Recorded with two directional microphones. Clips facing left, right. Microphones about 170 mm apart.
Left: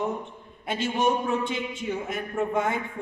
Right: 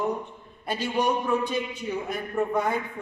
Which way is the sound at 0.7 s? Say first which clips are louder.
Left 1 dB; 25° left (ahead or behind).